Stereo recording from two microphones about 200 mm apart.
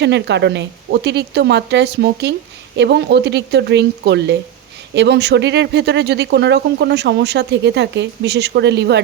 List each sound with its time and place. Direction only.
0.0 s speech: 60° right (ahead or behind)